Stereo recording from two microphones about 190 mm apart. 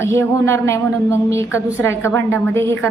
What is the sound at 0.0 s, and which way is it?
A woman's voice, 15° left (ahead or behind).